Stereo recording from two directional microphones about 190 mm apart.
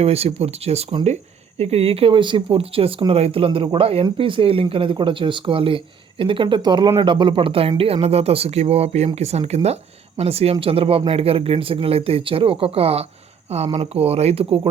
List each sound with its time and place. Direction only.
0.0 s speech: 30° right (ahead or behind)